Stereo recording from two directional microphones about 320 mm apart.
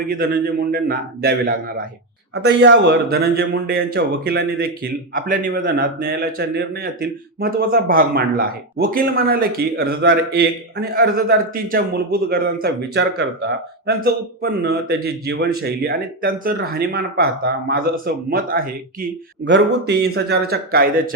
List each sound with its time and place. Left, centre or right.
0.0 s speech: right